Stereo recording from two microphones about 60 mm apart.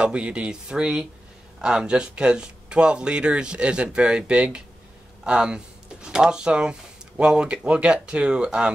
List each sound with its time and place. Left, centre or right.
0.0 s speech: centre